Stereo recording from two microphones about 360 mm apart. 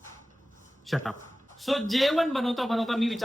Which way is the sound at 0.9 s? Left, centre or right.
Centre.